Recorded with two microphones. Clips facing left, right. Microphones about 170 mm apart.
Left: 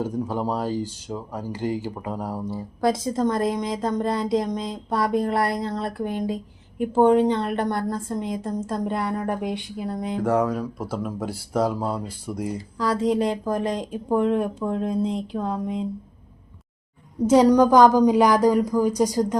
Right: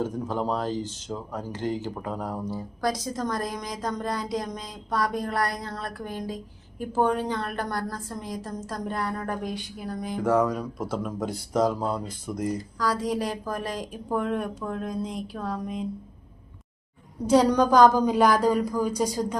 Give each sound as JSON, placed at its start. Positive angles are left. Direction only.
{"t": 0.0, "sound": "speech", "side_deg": 10}
{"t": 2.8, "sound": "a woman's voice", "side_deg": 25}
{"t": 10.2, "sound": "speech", "side_deg": 10}
{"t": 12.5, "sound": "a woman's voice", "side_deg": 25}
{"t": 17.2, "sound": "speech", "side_deg": 15}